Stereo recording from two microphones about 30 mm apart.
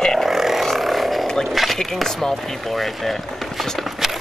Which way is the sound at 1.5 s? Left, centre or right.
Centre.